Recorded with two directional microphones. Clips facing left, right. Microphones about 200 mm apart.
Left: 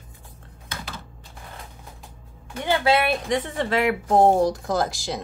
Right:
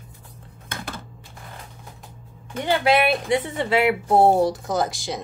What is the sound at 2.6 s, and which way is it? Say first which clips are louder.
A woman's voice: right 1 dB; 15° right (ahead or behind).